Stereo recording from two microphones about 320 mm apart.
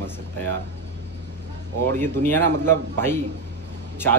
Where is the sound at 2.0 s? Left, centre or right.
Centre.